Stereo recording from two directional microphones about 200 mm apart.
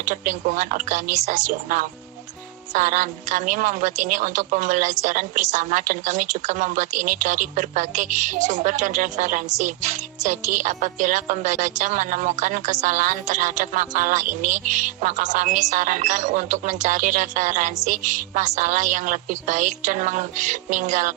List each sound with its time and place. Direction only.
0.0 s a woman's voice: 40° right (ahead or behind)